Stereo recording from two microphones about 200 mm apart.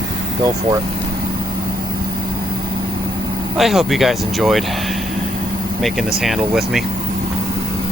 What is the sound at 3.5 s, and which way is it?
Speech, centre (ahead or behind).